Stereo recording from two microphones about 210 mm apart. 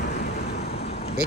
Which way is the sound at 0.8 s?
30° left (ahead or behind).